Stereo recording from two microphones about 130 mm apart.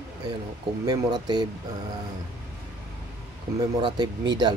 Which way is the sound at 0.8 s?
30° right (ahead or behind).